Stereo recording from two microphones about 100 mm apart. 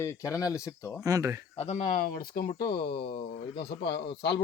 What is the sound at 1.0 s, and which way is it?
Speech, 35° right (ahead or behind).